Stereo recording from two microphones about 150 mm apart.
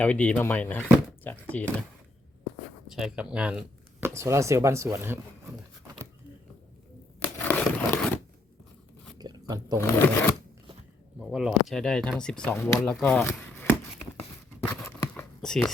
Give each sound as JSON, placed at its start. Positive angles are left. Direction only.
{"t": 0.0, "sound": "speech", "side_deg": 10}
{"t": 2.8, "sound": "speech", "side_deg": -5}
{"t": 4.0, "sound": "speech", "side_deg": -20}
{"t": 7.3, "sound": "a sound", "side_deg": 10}
{"t": 9.1, "sound": "biting", "side_deg": -25}
{"t": 9.7, "sound": "speech", "side_deg": 15}
{"t": 11.2, "sound": "speech", "side_deg": -5}
{"t": 14.7, "sound": "a sound", "side_deg": 20}
{"t": 15.4, "sound": "speech", "side_deg": 5}